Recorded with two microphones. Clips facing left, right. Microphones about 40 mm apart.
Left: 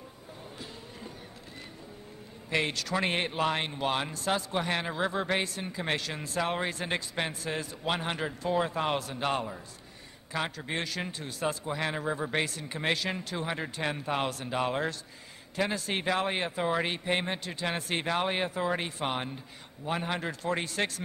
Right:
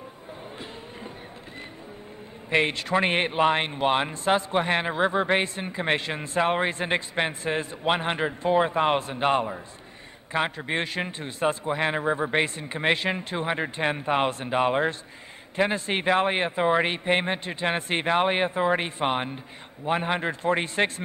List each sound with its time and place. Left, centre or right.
2.5 s a man's voice: right